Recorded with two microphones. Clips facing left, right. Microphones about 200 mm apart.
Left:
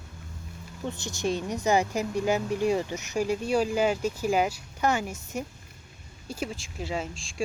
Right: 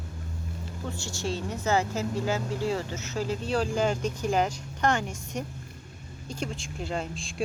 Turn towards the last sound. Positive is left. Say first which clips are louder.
# even
turn(degrees=0)  # may be behind; listen again after turning